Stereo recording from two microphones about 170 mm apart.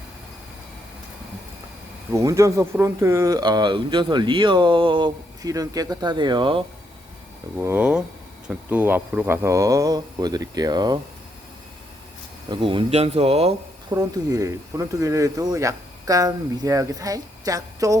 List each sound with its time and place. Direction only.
2.1 s speech: 15° right (ahead or behind)
7.6 s speech: 10° right (ahead or behind)
12.5 s speech: 30° right (ahead or behind)
13.9 s speech: 20° right (ahead or behind)